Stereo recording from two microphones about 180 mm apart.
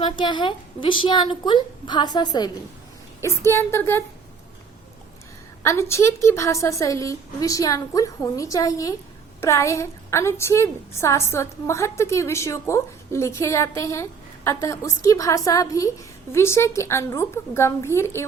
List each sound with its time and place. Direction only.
0.0 s a woman's voice: 25° left (ahead or behind)
5.6 s a woman's voice: 15° left (ahead or behind)